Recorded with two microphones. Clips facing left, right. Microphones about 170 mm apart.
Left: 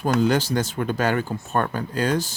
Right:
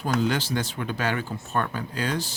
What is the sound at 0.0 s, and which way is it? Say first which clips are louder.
Speech: left 5 dB; 45° left (ahead or behind).